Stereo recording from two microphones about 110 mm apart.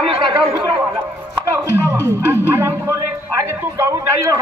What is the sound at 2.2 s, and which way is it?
Speech, 20° right (ahead or behind).